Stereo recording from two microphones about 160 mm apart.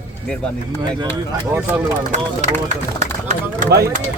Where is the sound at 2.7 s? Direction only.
50° right (ahead or behind).